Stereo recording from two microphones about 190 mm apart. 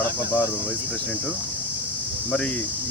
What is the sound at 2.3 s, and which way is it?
Speech, 5° left (ahead or behind).